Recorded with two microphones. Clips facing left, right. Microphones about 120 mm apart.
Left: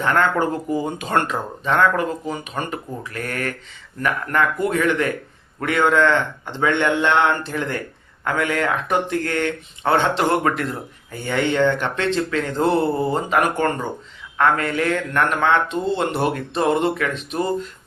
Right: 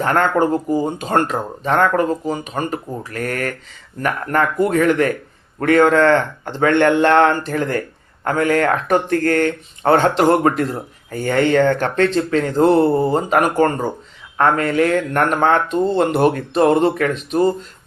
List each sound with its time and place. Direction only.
0.0 s speech: 40° right (ahead or behind)